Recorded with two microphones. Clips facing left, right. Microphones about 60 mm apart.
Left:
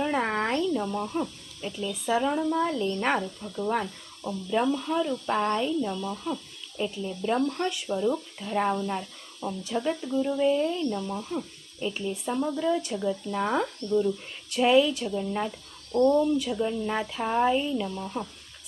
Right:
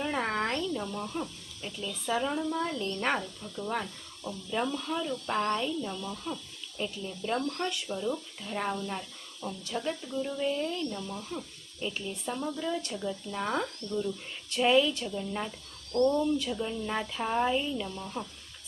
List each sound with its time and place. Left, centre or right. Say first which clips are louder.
0.0 s a sound: left 4 dB; centre
1.0 s speech: left 5 dB; centre
2.8 s speech: left 4 dB; centre
8.9 s a sound: left 5 dB; centre
9.6 s speech: left 6 dB; centre
11.1 s speech: left 6 dB; centre